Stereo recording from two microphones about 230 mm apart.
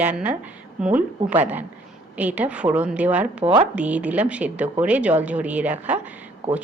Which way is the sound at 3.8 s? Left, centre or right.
Centre.